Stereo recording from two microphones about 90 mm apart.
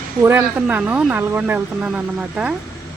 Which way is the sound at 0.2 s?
25° right (ahead or behind).